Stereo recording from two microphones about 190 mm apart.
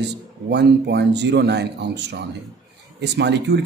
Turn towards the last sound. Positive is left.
turn(degrees=-65)  # may be behind; listen again after turning